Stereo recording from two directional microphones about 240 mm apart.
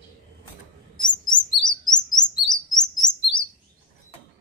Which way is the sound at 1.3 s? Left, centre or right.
Centre.